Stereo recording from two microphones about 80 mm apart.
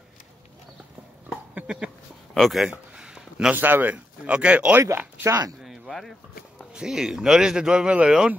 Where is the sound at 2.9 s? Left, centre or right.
Centre.